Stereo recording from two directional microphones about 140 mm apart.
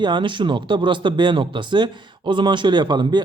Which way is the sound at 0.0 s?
35° right (ahead or behind).